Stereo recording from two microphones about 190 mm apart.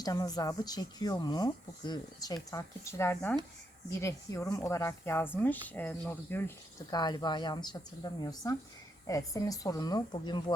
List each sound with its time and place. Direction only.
0.0 s speech: 20° left (ahead or behind)
6.9 s speech: 20° left (ahead or behind)